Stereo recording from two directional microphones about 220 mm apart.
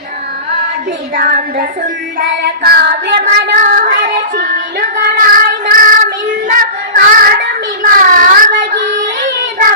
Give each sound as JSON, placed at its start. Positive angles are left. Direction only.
{"t": 1.1, "sound": "child singing", "side_deg": -40}